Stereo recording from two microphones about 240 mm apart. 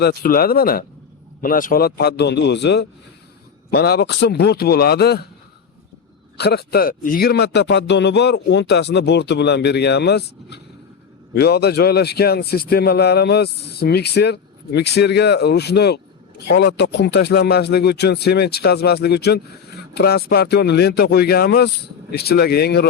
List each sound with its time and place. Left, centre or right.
0.0 s a man's voice: left
6.3 s a man's voice: left